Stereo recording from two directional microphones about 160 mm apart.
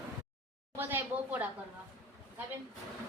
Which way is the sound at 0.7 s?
10° right (ahead or behind).